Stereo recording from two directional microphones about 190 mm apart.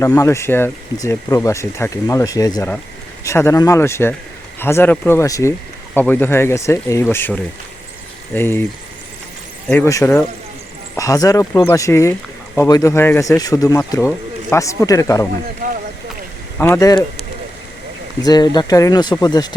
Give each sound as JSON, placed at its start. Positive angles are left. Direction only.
{"t": 0.0, "sound": "speech", "side_deg": 15}
{"t": 9.6, "sound": "speech", "side_deg": 10}
{"t": 16.6, "sound": "speech", "side_deg": 15}
{"t": 18.2, "sound": "speech", "side_deg": 20}